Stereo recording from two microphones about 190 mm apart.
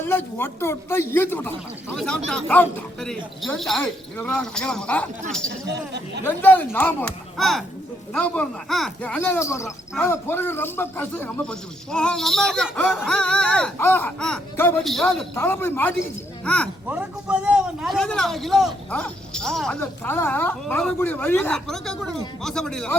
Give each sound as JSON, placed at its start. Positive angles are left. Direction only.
{"t": 0.0, "sound": "a man's voice", "side_deg": 10}
{"t": 5.7, "sound": "speech", "side_deg": -60}
{"t": 6.2, "sound": "a man's voice", "side_deg": 10}
{"t": 16.9, "sound": "a man's voice", "side_deg": -5}